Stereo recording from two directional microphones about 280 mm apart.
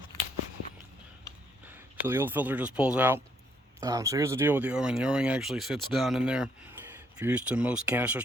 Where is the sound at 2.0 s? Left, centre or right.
Centre.